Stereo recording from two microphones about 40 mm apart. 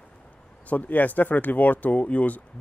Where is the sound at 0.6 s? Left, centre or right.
Left.